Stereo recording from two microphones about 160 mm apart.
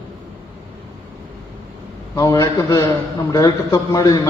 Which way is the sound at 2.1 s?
20° left (ahead or behind).